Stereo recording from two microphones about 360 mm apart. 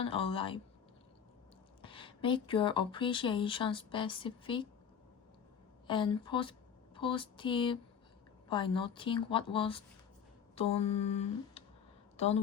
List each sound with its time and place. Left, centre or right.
0.0 s speech: centre
1.8 s speech: centre
5.9 s speech: centre